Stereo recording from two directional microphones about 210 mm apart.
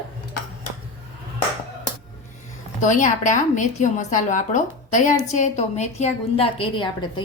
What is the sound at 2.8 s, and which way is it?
A woman's voice, 35° left (ahead or behind).